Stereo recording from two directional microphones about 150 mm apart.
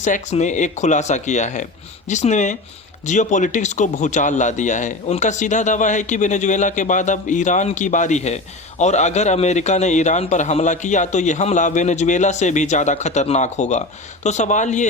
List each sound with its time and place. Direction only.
0.0 s a man's voice: 50° left (ahead or behind)